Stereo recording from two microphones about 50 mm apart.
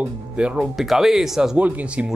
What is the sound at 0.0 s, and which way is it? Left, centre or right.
Speech, right.